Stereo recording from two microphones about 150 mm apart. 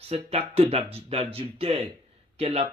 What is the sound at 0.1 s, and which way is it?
Speech, 40° right (ahead or behind).